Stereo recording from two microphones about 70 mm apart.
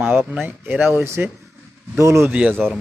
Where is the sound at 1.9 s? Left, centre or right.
Right.